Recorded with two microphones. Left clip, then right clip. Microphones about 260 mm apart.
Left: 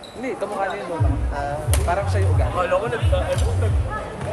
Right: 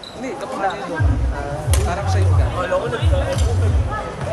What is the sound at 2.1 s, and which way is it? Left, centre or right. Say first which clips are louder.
Speech: right 1 dB; left.